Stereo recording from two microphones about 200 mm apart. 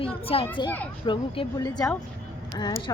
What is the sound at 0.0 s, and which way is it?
A child's voice, 30° left (ahead or behind).